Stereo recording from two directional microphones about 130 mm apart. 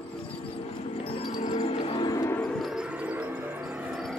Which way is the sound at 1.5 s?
55° left (ahead or behind).